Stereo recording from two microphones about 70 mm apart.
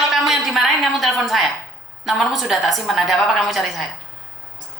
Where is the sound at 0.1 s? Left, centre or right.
Centre.